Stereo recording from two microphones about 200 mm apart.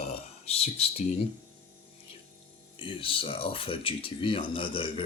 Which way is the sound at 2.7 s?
25° left (ahead or behind).